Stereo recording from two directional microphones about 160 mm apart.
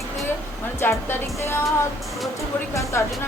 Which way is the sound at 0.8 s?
15° left (ahead or behind).